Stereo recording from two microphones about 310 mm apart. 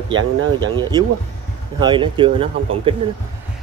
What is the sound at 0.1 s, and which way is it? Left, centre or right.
Speech, right.